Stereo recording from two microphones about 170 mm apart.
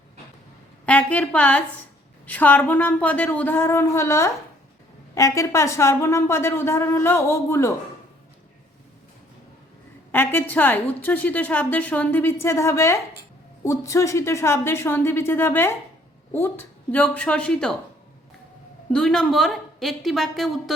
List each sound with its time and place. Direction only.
0.9 s a woman's voice: 10° left (ahead or behind)
10.1 s a woman's voice: 10° left (ahead or behind)
18.9 s a woman's voice: 5° left (ahead or behind)